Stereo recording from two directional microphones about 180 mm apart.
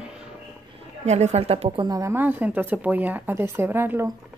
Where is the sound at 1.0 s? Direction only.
40° right (ahead or behind).